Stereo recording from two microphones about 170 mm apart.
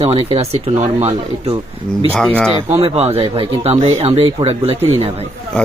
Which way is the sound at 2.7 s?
35° right (ahead or behind).